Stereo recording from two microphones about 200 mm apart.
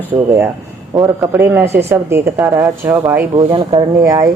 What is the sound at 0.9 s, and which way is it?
Speech, 15° right (ahead or behind).